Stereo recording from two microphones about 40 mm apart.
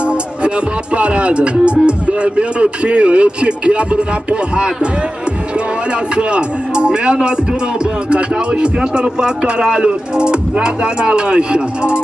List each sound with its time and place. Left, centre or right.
0.9 s speech: right
6.1 s speech: right